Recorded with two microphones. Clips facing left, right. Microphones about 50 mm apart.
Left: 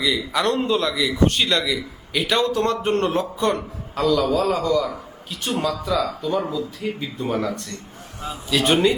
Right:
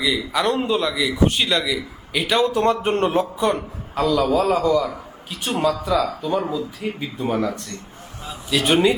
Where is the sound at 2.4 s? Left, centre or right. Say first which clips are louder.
Right 2 dB; centre.